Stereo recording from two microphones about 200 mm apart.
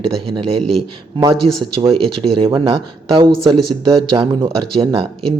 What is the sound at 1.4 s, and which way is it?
Speech, 30° right (ahead or behind).